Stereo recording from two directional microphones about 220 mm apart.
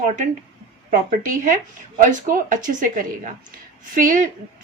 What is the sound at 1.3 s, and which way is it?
Speech, 35° right (ahead or behind).